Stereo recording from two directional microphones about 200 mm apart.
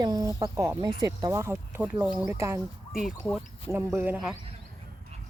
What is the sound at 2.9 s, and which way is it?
Speech, centre (ahead or behind).